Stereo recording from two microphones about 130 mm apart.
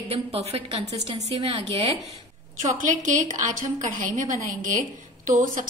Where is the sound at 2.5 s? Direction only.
75° right (ahead or behind).